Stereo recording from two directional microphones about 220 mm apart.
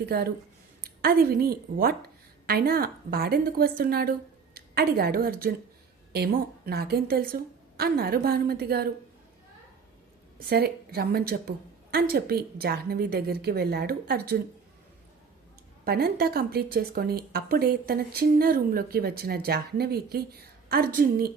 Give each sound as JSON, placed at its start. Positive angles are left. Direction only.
{"t": 0.0, "sound": "a woman's voice", "side_deg": -45}
{"t": 10.3, "sound": "speech", "side_deg": -45}
{"t": 15.8, "sound": "speech", "side_deg": -45}